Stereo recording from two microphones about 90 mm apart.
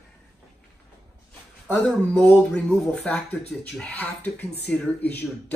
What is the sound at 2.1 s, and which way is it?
Speech, 15° left (ahead or behind).